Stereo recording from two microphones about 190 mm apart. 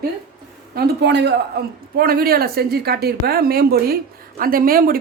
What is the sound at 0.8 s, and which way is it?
Speech, 65° right (ahead or behind).